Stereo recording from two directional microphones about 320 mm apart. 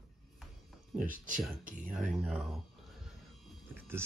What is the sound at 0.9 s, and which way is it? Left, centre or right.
Speech, right.